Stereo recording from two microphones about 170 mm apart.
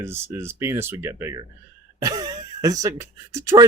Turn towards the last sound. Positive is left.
turn(degrees=-20)  # may be behind; listen again after turning